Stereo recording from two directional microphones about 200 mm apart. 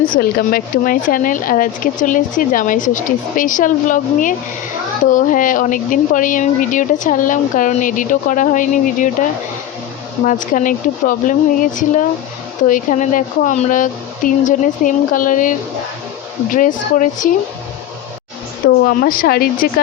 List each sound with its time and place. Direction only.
0.1 s speech: 50° left (ahead or behind)
10.2 s speech: 40° left (ahead or behind)
18.9 s speech: 45° left (ahead or behind)